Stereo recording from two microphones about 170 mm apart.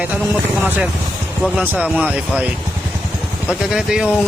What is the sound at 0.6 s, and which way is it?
Speech, 10° right (ahead or behind).